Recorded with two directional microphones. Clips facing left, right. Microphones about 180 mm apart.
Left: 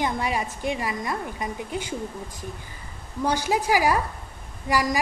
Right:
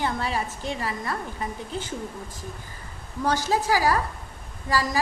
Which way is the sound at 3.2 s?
15° left (ahead or behind).